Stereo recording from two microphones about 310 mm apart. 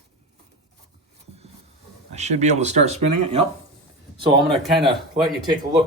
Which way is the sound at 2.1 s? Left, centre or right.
Right.